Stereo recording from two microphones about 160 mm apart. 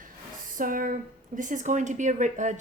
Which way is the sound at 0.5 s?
60° right (ahead or behind).